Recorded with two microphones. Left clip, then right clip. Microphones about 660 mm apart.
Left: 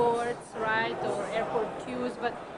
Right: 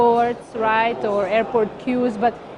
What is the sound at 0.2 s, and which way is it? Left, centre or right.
Speech, right.